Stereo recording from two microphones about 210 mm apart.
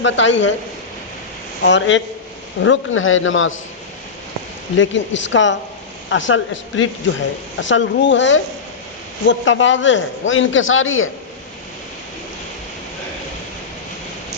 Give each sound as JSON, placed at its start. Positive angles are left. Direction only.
{"t": 0.0, "sound": "a man's voice", "side_deg": 60}
{"t": 1.6, "sound": "a man's voice", "side_deg": 60}
{"t": 2.6, "sound": "a man's voice", "side_deg": 70}
{"t": 4.8, "sound": "a man's voice", "side_deg": 60}